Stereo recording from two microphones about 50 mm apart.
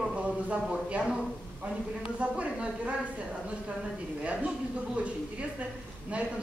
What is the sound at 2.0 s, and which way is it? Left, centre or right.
Speech, right.